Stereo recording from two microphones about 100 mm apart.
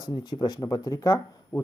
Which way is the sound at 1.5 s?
20° left (ahead or behind).